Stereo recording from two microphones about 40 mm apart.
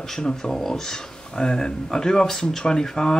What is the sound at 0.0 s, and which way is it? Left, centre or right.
Speech, centre.